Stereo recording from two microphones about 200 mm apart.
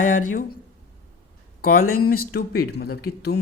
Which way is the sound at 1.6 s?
45° left (ahead or behind).